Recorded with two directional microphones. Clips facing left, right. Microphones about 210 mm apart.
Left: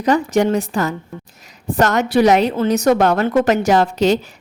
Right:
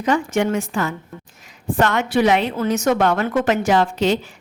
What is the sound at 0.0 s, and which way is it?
A woman's voice, 35° left (ahead or behind).